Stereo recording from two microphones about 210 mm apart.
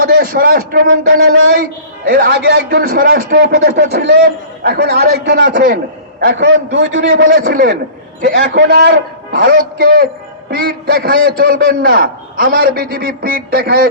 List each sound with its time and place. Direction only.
0.0 s a man's voice: 45° right (ahead or behind)
0.9 s speech: 70° right (ahead or behind)
2.0 s a man's voice: 50° right (ahead or behind)
6.7 s a man's voice: 60° right (ahead or behind)
7.4 s a man's voice: 45° right (ahead or behind)